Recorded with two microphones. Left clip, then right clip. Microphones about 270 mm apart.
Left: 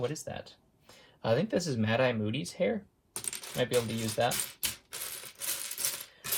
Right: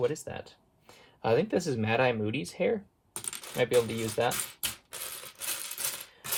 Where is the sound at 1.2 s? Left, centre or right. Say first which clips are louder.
Right 3 dB; right.